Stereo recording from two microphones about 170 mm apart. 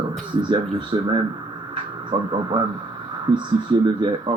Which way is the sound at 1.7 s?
30° right (ahead or behind).